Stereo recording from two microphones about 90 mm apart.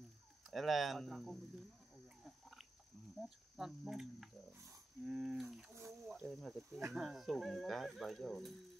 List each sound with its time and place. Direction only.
0.5 s speech: centre (ahead or behind)
3.2 s speech: 5° right (ahead or behind)